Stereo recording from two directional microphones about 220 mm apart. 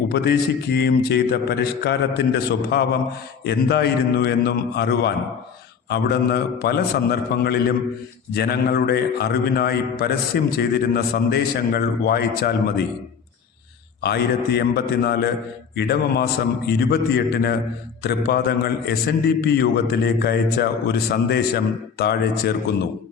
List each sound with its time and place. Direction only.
0.1 s a man's voice: 50° left (ahead or behind)
14.0 s a man's voice: 45° left (ahead or behind)